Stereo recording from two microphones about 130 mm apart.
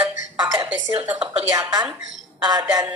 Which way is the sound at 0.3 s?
30° right (ahead or behind).